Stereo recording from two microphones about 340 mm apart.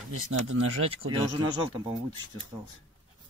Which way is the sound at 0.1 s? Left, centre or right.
Right.